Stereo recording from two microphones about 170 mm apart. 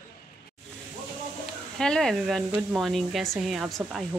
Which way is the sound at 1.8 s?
5° left (ahead or behind).